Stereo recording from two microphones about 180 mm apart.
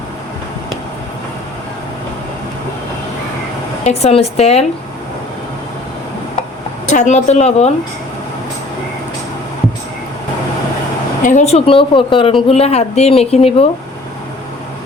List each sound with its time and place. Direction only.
3.8 s a woman's voice: 35° left (ahead or behind)
6.9 s a woman's voice: 40° left (ahead or behind)
11.2 s a woman's voice: 45° left (ahead or behind)